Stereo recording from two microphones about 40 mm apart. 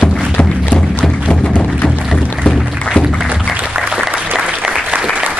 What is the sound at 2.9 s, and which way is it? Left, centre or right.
Music, left.